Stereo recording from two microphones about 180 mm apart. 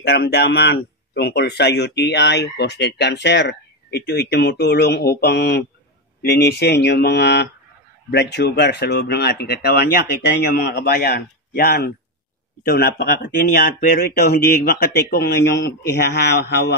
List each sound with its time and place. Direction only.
0.0 s a man's voice: 65° left (ahead or behind)